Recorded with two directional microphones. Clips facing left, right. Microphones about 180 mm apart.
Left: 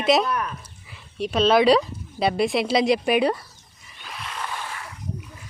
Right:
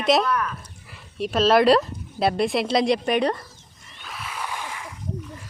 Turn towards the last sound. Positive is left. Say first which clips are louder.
# even
turn(degrees=-15)  # may be behind; listen again after turning